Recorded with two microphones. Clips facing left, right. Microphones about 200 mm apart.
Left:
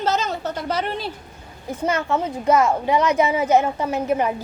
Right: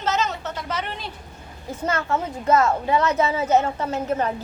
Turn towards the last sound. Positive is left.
turn(degrees=15)  # may be behind; listen again after turning